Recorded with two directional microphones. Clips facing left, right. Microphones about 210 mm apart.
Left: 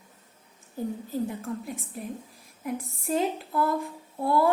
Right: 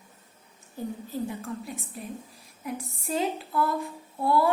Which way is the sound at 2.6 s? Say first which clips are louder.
Left 2 dB; 50° left (ahead or behind).